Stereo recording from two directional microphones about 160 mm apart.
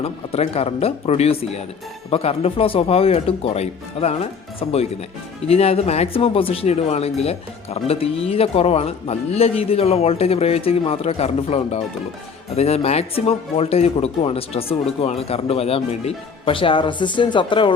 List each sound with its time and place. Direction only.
0.0 s speech: 40° left (ahead or behind)